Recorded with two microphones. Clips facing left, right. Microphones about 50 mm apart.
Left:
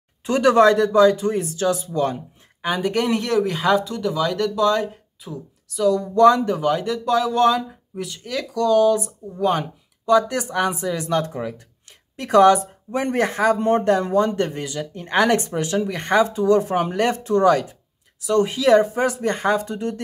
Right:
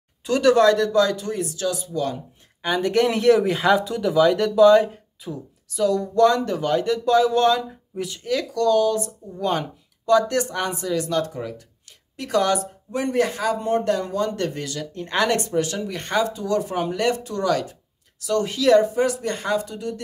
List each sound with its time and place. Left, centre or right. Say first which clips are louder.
0.2 s speech: left 2 dB; left
2.6 s speech: right 2 dB; centre
6.1 s speech: left 4 dB; centre; by 20.0 s left